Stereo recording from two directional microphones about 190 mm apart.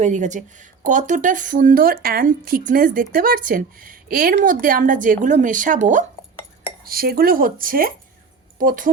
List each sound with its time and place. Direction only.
0.0 s a woman's voice: 40° right (ahead or behind)
6.8 s speech: 50° right (ahead or behind)